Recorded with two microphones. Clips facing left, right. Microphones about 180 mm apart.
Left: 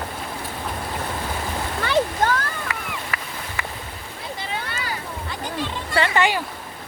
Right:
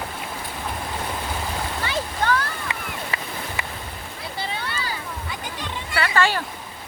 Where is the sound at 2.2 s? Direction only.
45° left (ahead or behind).